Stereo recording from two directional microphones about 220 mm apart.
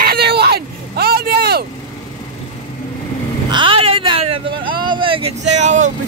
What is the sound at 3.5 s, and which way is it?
Vehicle, 25° right (ahead or behind).